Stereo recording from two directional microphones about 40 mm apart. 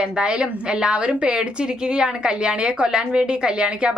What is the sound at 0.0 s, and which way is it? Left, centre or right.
A woman's voice, right.